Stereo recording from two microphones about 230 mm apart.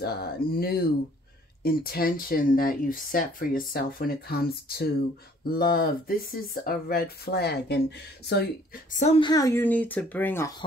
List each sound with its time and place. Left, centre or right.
0.0 s speech: left
9.0 s speech: left